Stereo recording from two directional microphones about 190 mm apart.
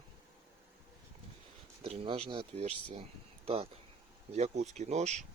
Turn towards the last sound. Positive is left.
turn(degrees=-35)  # may be behind; listen again after turning